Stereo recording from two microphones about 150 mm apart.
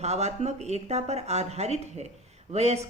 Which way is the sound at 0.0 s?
50° right (ahead or behind).